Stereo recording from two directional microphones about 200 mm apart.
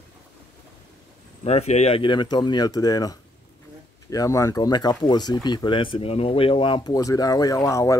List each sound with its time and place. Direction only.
1.4 s speech: 30° left (ahead or behind); by 8.0 s 15° left (ahead or behind)